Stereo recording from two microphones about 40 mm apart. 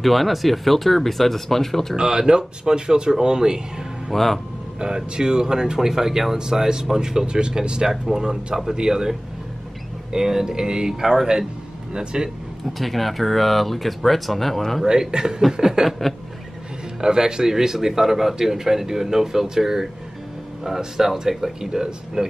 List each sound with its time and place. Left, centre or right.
0.0 s speech: centre
2.0 s speech: centre
4.1 s speech: centre
4.7 s a man's voice: centre
10.1 s a man's voice: centre
12.7 s speech: centre
14.9 s a man's voice: centre
17.0 s a man's voice: centre